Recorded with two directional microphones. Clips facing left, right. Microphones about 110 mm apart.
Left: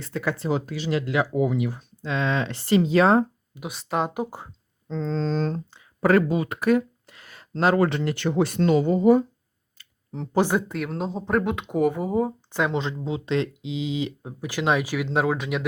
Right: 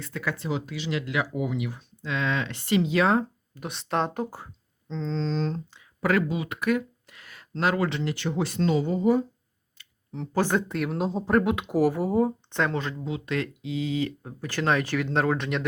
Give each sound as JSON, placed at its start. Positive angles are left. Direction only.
{"t": 0.0, "sound": "speech", "side_deg": 30}
{"t": 3.5, "sound": "speech", "side_deg": 5}
{"t": 4.9, "sound": "speech", "side_deg": 45}
{"t": 7.9, "sound": "speech", "side_deg": 50}
{"t": 9.7, "sound": "clicking", "side_deg": 40}
{"t": 10.3, "sound": "speech", "side_deg": 10}
{"t": 12.7, "sound": "speech", "side_deg": 20}